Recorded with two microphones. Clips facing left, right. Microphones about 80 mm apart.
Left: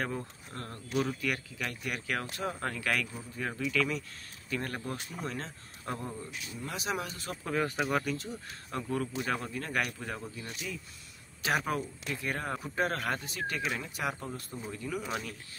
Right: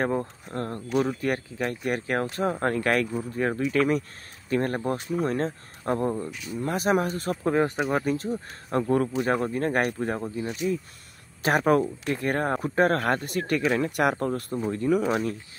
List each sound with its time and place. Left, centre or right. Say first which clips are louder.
0.0 s speech: right 9 dB; right
11.4 s speech: right 10 dB; right